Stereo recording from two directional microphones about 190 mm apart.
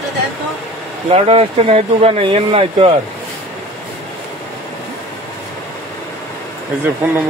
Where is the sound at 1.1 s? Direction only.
30° right (ahead or behind).